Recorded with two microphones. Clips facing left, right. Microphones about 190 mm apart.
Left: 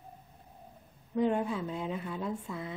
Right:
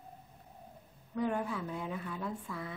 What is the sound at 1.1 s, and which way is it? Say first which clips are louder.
Speech: left 5 dB; 20° left (ahead or behind).